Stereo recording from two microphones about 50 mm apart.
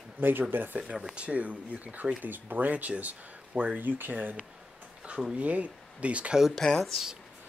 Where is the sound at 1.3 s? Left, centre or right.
Right.